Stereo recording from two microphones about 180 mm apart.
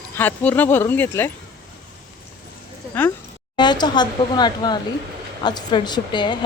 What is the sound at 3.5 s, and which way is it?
Speech, 25° left (ahead or behind).